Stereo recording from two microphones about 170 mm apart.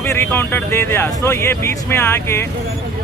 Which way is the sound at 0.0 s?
15° left (ahead or behind).